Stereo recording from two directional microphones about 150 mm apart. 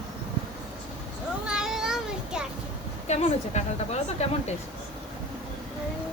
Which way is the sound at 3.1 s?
50° left (ahead or behind).